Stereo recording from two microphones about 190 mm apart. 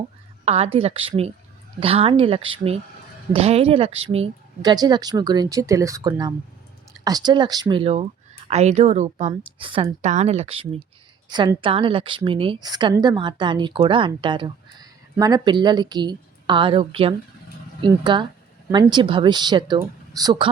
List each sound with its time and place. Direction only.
0.4 s a woman's voice: 35° right (ahead or behind)
10.0 s a woman's voice: 40° right (ahead or behind); by 20.5 s 20° right (ahead or behind)